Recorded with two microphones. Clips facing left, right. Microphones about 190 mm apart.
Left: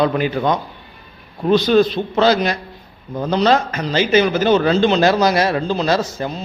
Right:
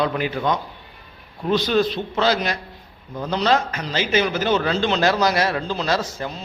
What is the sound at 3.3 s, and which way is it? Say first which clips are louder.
Speech: left 4 dB; 35° left (ahead or behind).